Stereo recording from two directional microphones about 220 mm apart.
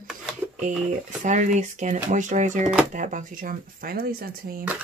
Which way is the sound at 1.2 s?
35° right (ahead or behind).